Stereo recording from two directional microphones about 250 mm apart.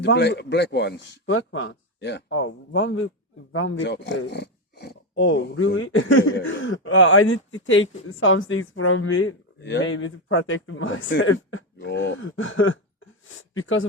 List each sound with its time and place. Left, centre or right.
0.0 s speech: left